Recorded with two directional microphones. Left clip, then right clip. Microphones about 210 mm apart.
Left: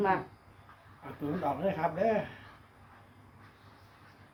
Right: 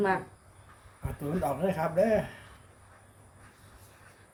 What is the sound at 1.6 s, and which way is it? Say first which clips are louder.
Speech: right 3 dB; 50° right (ahead or behind).